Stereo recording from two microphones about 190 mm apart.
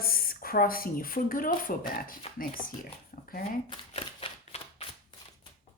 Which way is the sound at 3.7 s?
30° left (ahead or behind).